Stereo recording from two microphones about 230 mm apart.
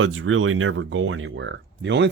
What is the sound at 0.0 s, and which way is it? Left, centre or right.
Speech, right.